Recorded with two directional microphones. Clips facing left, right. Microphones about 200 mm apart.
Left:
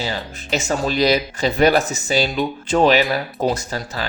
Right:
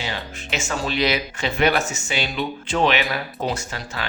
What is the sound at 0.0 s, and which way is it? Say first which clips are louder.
Speech: left 4 dB; 35° left (ahead or behind).